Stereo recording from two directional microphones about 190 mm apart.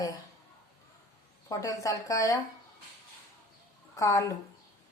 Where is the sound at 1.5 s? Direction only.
15° left (ahead or behind).